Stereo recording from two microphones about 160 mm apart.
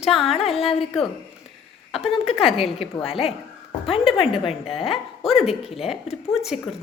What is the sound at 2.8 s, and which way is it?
A woman's voice, 35° left (ahead or behind).